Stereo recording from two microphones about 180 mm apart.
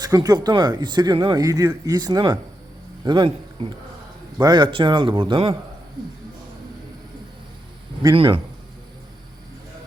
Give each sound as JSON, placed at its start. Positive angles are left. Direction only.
{"t": 0.0, "sound": "a man's voice", "side_deg": -20}
{"t": 4.4, "sound": "speech", "side_deg": -25}
{"t": 8.1, "sound": "speech", "side_deg": -30}